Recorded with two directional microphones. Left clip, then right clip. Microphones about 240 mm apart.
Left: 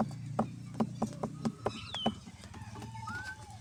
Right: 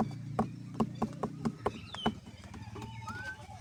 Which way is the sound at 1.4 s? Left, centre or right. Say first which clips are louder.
Even; centre.